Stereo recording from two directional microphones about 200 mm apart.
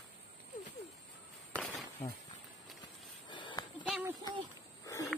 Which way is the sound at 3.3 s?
25° left (ahead or behind).